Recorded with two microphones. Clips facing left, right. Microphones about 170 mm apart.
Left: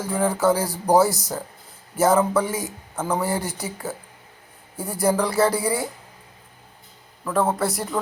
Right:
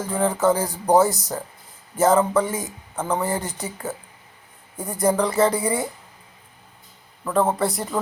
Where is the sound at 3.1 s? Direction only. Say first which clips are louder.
Left 1 dB; 15° right (ahead or behind).